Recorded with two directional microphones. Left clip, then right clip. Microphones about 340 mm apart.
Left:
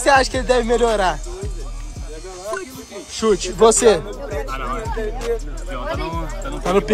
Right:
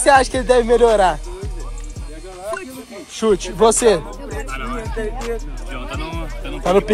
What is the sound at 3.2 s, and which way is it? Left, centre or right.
Speech, centre.